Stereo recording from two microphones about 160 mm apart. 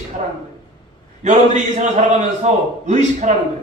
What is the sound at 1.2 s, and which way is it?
A man's voice, 45° right (ahead or behind).